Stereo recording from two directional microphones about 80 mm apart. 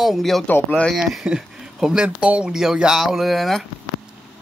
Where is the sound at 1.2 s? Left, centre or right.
Centre.